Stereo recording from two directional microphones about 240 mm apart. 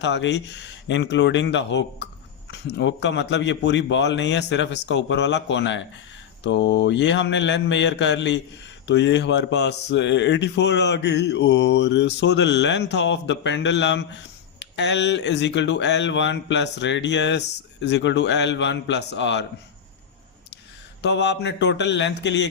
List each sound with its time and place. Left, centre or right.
0.0 s speech: left
21.0 s speech: left